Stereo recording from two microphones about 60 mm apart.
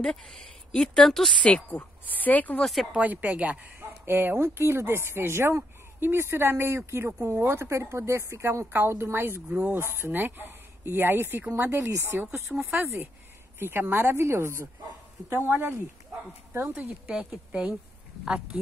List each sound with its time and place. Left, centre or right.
0.0 s a woman's voice: centre
1.4 s speech: left
2.6 s a woman's voice: centre
3.0 s speech: right
3.8 s speech: right
9.5 s speech: right
9.8 s speech: right
13.6 s speech: right
17.0 s speech: centre